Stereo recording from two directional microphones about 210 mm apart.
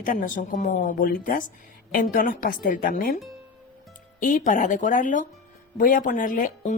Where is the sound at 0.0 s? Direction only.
40° left (ahead or behind).